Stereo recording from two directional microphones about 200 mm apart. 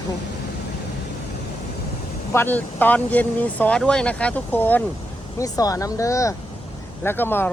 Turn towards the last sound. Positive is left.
turn(degrees=10)  # may be behind; listen again after turning